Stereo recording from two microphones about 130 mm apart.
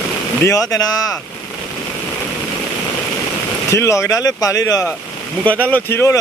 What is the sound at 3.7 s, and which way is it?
Speech, 25° left (ahead or behind).